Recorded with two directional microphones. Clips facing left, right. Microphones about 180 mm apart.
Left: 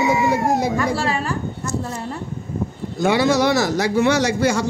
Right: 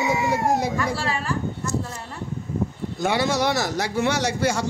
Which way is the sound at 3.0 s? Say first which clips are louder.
Left 5 dB; 90° left.